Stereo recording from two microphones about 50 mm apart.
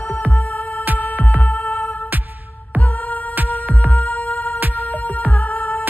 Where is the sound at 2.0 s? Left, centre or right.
Right.